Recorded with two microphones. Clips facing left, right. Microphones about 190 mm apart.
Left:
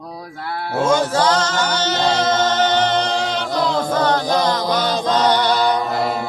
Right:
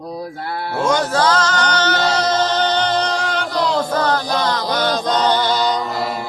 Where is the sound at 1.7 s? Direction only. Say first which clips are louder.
Right 1 dB; 25° left (ahead or behind).